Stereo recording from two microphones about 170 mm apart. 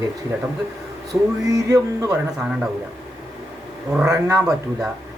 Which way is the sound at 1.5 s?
20° right (ahead or behind).